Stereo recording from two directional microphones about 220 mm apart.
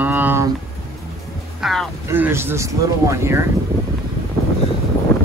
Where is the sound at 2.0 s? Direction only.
10° right (ahead or behind).